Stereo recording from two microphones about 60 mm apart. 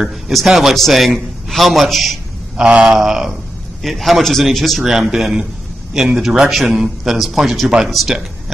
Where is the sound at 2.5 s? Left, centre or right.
Centre.